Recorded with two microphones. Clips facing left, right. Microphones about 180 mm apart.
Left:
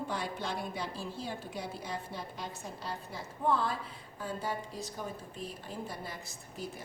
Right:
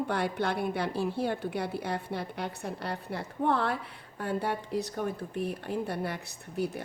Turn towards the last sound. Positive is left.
turn(degrees=-65)  # may be behind; listen again after turning